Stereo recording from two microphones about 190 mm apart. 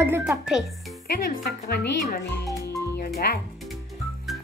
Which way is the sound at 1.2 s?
50° left (ahead or behind).